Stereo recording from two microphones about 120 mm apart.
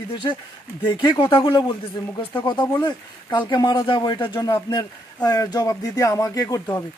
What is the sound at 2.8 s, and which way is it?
Speech, 40° left (ahead or behind).